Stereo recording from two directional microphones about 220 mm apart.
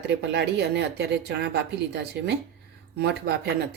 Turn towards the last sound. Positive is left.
turn(degrees=-50)  # may be behind; listen again after turning